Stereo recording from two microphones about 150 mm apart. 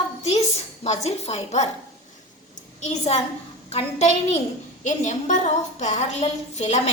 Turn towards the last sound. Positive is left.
turn(degrees=45)  # may be behind; listen again after turning